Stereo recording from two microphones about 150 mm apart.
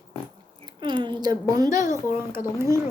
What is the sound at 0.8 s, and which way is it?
A woman's voice, 30° right (ahead or behind).